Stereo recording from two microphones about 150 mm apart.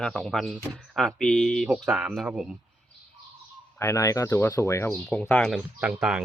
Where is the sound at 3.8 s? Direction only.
20° left (ahead or behind).